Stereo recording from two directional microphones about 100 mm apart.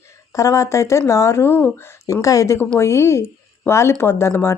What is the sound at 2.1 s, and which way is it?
A woman's voice, 35° left (ahead or behind).